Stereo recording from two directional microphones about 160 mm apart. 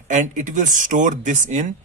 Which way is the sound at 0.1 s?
50° right (ahead or behind).